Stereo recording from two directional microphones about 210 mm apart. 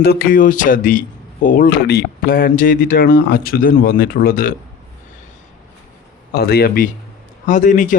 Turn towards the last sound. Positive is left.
turn(degrees=40)  # may be behind; listen again after turning